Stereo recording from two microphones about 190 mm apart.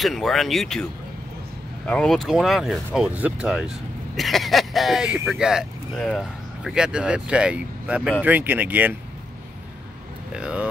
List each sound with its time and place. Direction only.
0.0 s speech: centre (ahead or behind)
1.9 s speech: 5° left (ahead or behind)
10.3 s speech: 5° right (ahead or behind)